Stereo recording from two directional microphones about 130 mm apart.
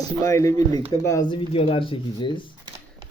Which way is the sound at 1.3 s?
45° left (ahead or behind).